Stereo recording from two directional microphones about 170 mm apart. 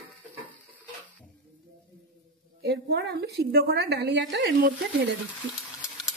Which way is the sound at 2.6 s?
70° right (ahead or behind).